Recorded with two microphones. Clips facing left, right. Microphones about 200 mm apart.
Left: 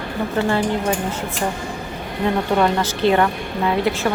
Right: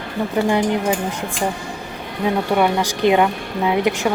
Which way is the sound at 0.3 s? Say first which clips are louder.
Right 2 dB; 15° right (ahead or behind).